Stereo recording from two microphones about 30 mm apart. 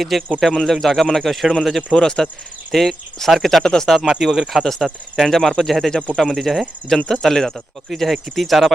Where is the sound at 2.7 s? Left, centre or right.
Centre.